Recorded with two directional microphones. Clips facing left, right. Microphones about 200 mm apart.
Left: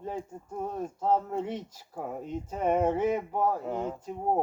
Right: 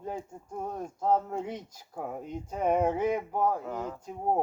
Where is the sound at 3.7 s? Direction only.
25° left (ahead or behind).